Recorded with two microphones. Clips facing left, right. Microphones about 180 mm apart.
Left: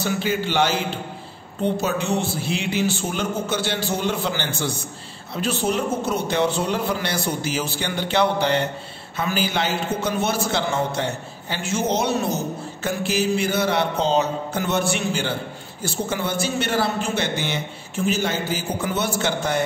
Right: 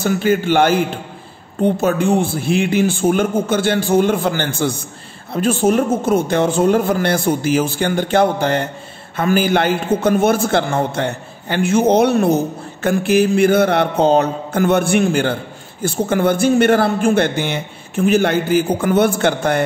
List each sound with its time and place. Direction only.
0.0 s a man's voice: 50° right (ahead or behind)